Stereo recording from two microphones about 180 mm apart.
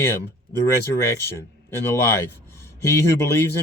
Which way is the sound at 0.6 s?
15° left (ahead or behind).